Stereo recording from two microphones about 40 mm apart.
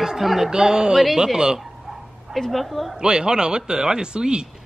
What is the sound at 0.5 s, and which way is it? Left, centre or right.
Speech, centre.